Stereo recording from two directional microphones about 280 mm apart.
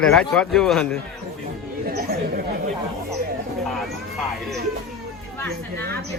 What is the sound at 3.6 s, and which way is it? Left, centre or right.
Speech, centre.